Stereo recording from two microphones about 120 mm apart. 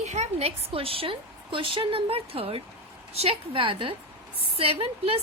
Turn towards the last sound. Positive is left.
turn(degrees=-55)  # may be behind; listen again after turning